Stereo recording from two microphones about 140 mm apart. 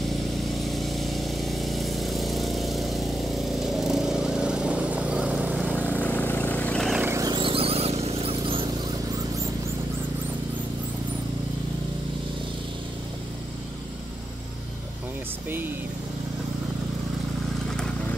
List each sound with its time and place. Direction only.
0.6 s power tool: centre (ahead or behind)
5.8 s vehicle: 10° left (ahead or behind)
7.0 s vehicle: 20° right (ahead or behind)
7.2 s a sound: 35° right (ahead or behind)